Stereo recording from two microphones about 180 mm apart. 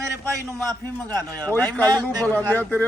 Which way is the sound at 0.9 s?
10° left (ahead or behind).